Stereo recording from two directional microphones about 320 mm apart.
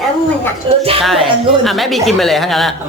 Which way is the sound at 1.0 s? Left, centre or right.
Centre.